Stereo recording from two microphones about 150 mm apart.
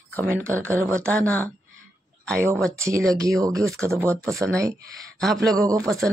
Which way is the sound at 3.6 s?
5° left (ahead or behind).